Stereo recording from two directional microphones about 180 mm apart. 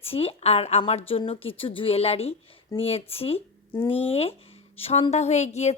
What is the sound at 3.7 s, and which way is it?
Speech, 10° left (ahead or behind).